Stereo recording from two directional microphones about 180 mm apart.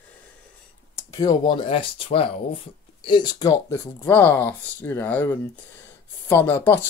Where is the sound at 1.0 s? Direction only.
20° left (ahead or behind).